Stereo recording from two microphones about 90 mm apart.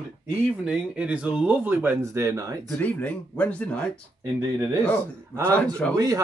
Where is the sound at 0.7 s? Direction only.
15° right (ahead or behind); by 2.7 s 40° right (ahead or behind).